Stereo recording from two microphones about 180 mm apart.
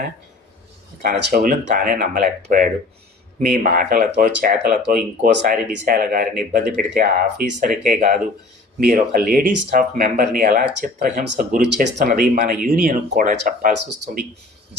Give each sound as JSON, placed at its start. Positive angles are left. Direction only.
{"t": 1.0, "sound": "speech", "side_deg": -55}